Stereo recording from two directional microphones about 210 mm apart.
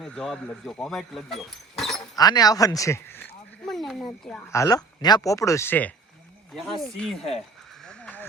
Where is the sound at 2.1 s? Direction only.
20° left (ahead or behind).